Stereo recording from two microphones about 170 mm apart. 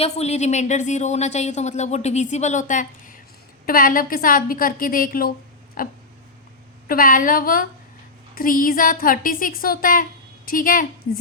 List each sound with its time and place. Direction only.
0.0 s a woman's voice: 40° left (ahead or behind); by 5.3 s 55° left (ahead or behind)
5.8 s a sound: 55° left (ahead or behind)
6.8 s a woman's voice: 55° left (ahead or behind)